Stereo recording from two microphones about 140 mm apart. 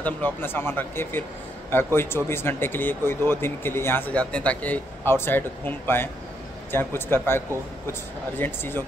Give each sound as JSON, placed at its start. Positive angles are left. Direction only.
{"t": 0.0, "sound": "speech", "side_deg": 15}